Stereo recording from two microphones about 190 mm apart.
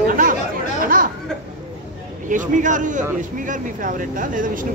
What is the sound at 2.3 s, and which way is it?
Speech, 40° right (ahead or behind).